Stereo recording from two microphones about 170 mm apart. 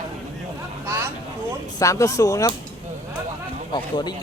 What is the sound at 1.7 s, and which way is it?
Speech, 20° left (ahead or behind).